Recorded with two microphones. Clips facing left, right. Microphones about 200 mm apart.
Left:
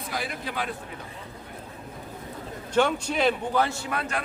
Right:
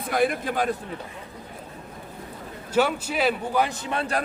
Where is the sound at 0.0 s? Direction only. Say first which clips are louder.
Right 9 dB; 55° right (ahead or behind).